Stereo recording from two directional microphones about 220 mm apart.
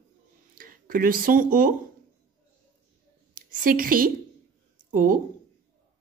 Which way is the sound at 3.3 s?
40° right (ahead or behind).